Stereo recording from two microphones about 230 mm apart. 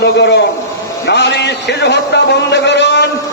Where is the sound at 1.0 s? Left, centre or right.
Left.